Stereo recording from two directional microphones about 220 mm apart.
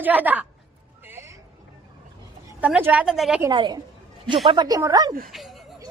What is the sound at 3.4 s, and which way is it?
A woman's voice, 20° right (ahead or behind).